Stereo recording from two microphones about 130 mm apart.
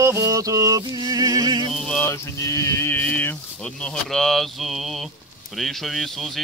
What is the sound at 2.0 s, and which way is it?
Speech, 25° left (ahead or behind).